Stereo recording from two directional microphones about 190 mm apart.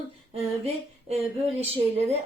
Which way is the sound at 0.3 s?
30° right (ahead or behind).